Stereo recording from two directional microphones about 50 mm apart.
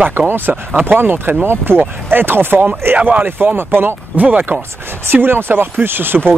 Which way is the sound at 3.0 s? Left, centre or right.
Right.